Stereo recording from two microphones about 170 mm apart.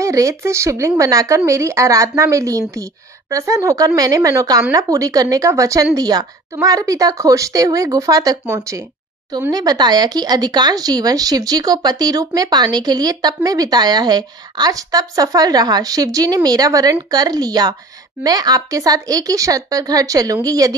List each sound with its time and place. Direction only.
0.0 s a woman's voice: 20° right (ahead or behind)